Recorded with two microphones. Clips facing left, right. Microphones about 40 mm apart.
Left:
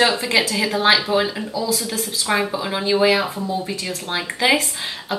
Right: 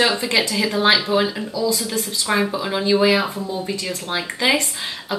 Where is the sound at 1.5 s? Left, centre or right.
Left.